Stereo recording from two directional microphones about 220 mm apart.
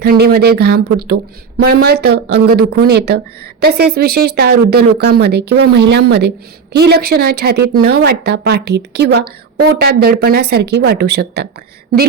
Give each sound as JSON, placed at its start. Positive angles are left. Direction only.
{"t": 0.0, "sound": "a woman's voice", "side_deg": -45}